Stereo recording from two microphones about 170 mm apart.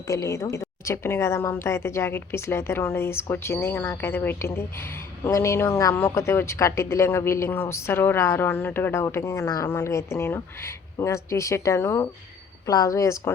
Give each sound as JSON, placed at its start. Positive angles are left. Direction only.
{"t": 0.1, "sound": "a woman's voice", "side_deg": 20}